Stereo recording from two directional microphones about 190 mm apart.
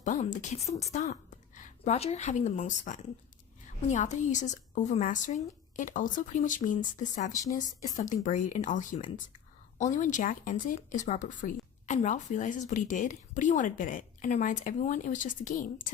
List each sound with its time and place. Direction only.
0.0 s a woman's voice: 40° left (ahead or behind)